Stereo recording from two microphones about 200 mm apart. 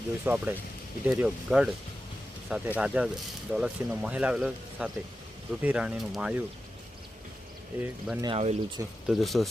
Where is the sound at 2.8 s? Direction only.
5° right (ahead or behind).